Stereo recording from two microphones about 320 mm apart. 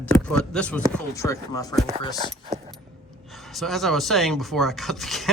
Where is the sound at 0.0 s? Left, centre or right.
Centre.